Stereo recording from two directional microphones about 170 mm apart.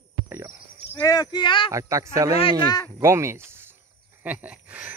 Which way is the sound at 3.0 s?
15° right (ahead or behind).